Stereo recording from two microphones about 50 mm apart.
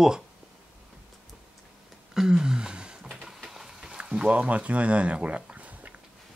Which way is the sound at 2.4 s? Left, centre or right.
Centre.